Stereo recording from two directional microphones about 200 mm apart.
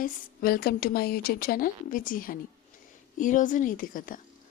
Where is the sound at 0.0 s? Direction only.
50° left (ahead or behind).